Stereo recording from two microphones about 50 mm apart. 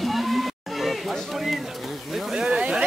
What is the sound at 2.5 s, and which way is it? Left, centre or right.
Speech, centre.